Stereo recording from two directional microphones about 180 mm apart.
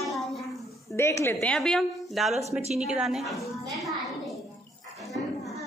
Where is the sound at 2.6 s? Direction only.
40° right (ahead or behind).